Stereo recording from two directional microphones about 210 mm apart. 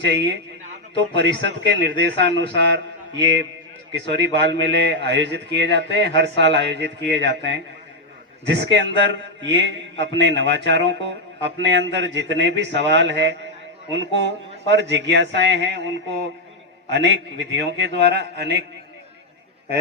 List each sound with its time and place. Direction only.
0.0 s a man's voice: 55° right (ahead or behind)
3.9 s a man's voice: 55° right (ahead or behind)
16.9 s a man's voice: 50° right (ahead or behind)